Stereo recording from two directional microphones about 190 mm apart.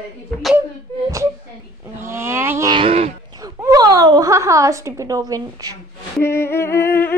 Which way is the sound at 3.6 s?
20° right (ahead or behind).